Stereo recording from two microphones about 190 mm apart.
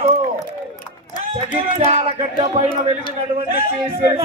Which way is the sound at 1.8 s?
35° right (ahead or behind).